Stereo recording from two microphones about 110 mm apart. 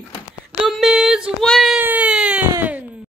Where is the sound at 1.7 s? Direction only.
15° right (ahead or behind).